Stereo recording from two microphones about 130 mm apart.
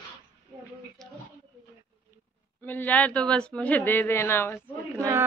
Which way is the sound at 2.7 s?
15° left (ahead or behind).